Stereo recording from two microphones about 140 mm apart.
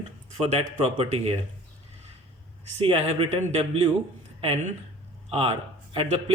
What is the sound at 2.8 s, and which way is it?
A man's voice, 45° right (ahead or behind).